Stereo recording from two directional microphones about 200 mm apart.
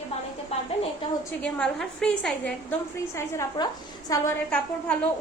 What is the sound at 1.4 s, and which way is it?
A woman's voice, 5° left (ahead or behind).